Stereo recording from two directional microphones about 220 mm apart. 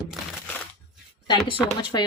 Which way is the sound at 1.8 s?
20° left (ahead or behind).